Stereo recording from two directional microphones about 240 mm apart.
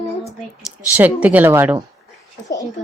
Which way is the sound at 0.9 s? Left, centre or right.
Centre.